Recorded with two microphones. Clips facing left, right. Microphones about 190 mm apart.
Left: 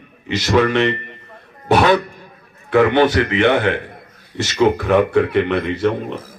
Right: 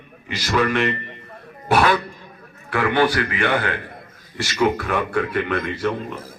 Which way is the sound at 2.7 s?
20° left (ahead or behind).